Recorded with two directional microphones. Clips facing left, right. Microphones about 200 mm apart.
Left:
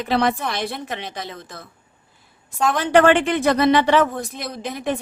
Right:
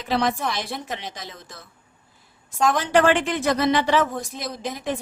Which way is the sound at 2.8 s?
60° left (ahead or behind).